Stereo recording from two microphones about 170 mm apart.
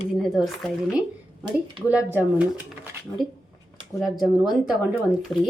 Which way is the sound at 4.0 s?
Centre (ahead or behind).